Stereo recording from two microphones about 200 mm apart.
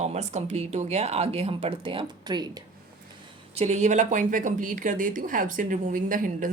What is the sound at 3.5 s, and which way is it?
Speech, 30° right (ahead or behind).